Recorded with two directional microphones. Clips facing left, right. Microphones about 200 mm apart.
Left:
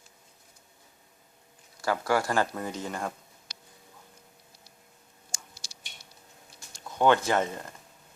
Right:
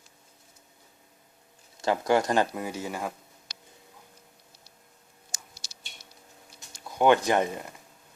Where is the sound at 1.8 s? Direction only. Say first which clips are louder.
Right 3 dB; 20° right (ahead or behind); by 3.1 s 5° right (ahead or behind).